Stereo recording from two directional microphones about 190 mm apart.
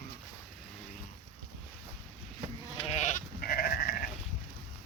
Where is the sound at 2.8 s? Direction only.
35° left (ahead or behind).